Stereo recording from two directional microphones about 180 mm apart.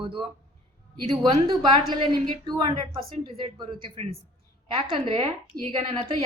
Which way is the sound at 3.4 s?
30° right (ahead or behind).